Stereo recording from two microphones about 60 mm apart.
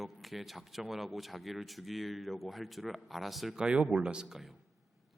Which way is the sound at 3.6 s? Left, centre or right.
Centre.